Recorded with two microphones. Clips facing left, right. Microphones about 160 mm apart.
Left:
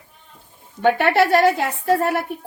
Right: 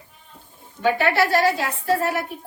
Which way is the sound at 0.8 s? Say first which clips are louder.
Left 3 dB; 60° left (ahead or behind).